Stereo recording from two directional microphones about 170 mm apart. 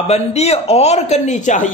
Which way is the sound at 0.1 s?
40° left (ahead or behind).